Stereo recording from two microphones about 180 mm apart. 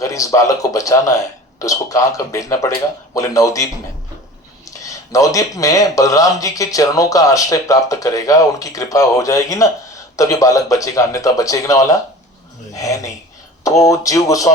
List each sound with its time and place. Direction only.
0.0 s speech: 20° left (ahead or behind)
4.8 s speech: 20° left (ahead or behind)